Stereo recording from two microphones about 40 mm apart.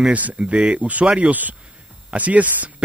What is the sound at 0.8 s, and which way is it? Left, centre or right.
Speech, right.